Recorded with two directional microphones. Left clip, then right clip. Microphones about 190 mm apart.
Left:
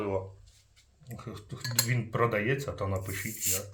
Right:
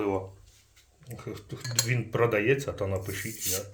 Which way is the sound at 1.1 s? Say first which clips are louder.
Right 4 dB; 30° right (ahead or behind).